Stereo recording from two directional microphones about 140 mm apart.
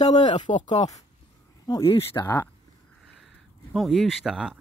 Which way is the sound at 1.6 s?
30° left (ahead or behind).